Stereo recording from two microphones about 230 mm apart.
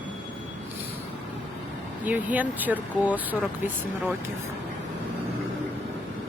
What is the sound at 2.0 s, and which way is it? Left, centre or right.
Speech, centre.